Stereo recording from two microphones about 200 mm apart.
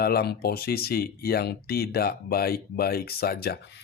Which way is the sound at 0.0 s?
50° left (ahead or behind).